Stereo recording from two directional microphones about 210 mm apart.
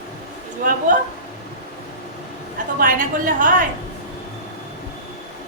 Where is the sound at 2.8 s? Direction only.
40° right (ahead or behind).